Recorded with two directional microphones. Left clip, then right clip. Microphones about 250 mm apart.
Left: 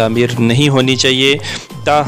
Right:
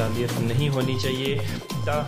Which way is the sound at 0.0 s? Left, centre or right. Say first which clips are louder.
Left 13 dB; left.